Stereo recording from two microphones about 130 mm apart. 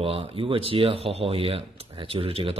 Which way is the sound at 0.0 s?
45° right (ahead or behind).